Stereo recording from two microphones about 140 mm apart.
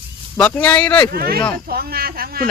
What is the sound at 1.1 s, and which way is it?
Speech, 90° right.